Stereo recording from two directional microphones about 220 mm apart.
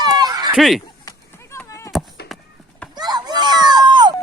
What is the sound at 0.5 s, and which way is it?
Speech, centre (ahead or behind).